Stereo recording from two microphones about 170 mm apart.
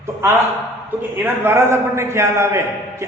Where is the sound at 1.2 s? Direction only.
15° right (ahead or behind).